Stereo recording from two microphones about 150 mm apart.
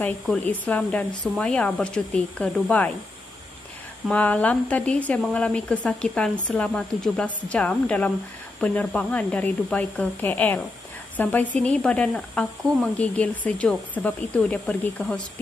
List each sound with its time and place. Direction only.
0.0 s speech: 10° left (ahead or behind)
4.1 s speech: 10° left (ahead or behind)